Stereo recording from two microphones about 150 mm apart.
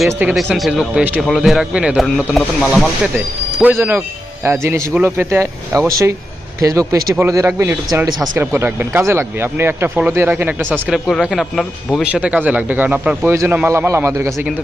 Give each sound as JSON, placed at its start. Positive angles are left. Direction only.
{"t": 0.1, "sound": "speech", "side_deg": -10}
{"t": 0.3, "sound": "speech", "side_deg": 0}
{"t": 3.6, "sound": "a man's voice", "side_deg": -15}
{"t": 10.7, "sound": "a man's voice", "side_deg": 0}